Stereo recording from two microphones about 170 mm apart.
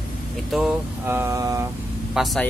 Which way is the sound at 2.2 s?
5° right (ahead or behind).